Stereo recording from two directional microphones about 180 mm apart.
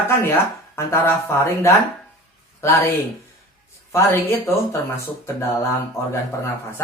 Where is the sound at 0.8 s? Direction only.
15° left (ahead or behind).